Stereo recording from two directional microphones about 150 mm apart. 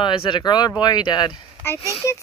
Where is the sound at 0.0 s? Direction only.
35° left (ahead or behind).